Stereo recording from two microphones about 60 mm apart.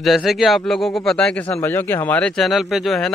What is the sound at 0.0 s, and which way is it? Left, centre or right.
Speech, centre.